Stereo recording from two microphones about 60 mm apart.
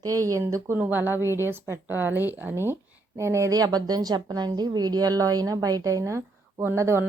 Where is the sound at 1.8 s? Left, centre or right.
Right.